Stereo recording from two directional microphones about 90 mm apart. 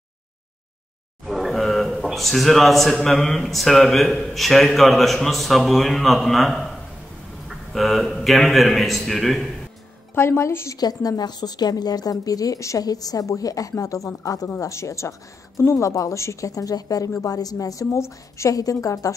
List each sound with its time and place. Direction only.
1.2 s a sound: centre (ahead or behind)
3.1 s a man's voice: 5° left (ahead or behind)
10.1 s a woman's voice: 30° left (ahead or behind)
10.8 s speech: 45° left (ahead or behind)